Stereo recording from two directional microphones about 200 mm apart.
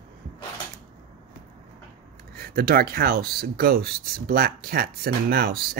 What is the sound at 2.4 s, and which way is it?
Speech, 50° right (ahead or behind).